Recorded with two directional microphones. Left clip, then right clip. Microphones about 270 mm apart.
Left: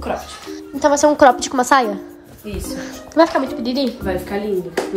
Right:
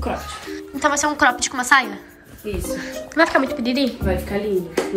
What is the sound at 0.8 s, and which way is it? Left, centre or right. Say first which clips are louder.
A woman's voice: left 6 dB; left.